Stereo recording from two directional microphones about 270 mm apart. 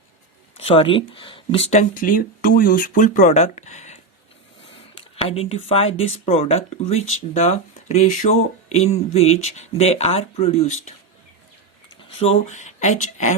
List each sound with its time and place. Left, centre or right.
0.5 s speech: left
5.1 s speech: left
12.2 s speech: left